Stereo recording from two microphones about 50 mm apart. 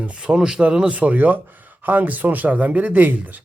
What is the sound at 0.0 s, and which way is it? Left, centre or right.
Speech, right.